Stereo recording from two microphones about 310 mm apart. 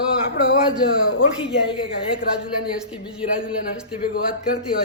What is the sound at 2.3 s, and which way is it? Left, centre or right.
Speech, centre.